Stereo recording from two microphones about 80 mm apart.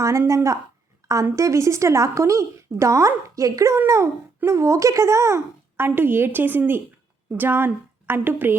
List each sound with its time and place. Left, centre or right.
0.0 s a woman's voice: right